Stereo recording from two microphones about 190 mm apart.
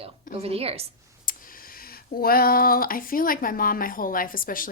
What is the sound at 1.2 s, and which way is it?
Speech, 50° left (ahead or behind).